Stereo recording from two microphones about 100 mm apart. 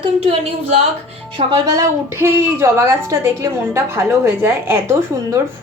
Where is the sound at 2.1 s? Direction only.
25° right (ahead or behind).